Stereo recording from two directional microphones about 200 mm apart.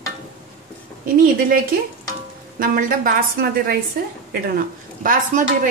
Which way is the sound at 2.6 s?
45° right (ahead or behind).